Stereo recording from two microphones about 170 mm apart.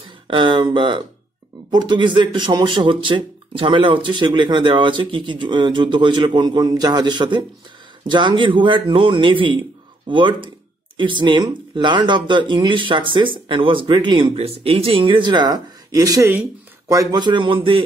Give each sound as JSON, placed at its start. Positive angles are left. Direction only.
{"t": 0.3, "sound": "speech", "side_deg": -30}